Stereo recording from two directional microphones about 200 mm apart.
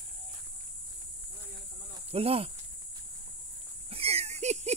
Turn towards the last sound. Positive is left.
turn(degrees=-35)  # may be behind; listen again after turning